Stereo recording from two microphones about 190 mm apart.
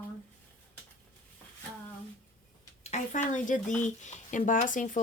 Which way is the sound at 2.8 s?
35° left (ahead or behind).